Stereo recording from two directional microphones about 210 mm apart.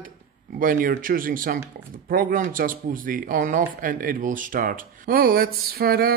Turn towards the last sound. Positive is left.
turn(degrees=-45)  # may be behind; listen again after turning